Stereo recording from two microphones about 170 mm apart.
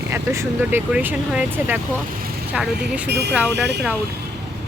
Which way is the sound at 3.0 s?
80° right.